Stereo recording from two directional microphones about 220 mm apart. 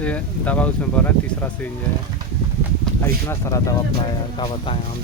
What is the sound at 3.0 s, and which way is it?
Speech, 15° left (ahead or behind).